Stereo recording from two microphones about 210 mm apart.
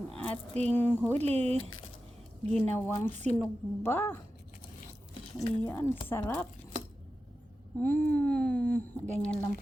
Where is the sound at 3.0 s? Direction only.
35° right (ahead or behind).